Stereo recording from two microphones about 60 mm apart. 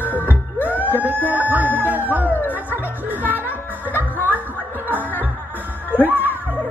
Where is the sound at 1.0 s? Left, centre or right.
Right.